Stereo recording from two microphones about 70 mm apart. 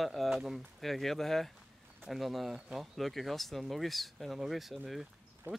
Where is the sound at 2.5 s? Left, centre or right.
Centre.